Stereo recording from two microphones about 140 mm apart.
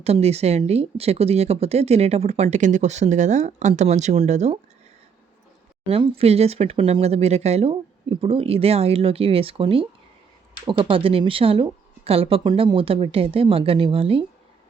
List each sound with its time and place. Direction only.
0.0 s speech: 50° right (ahead or behind)
5.9 s a woman's voice: 45° right (ahead or behind)